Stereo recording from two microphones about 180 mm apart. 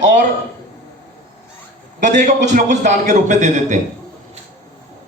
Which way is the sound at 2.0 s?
45° right (ahead or behind).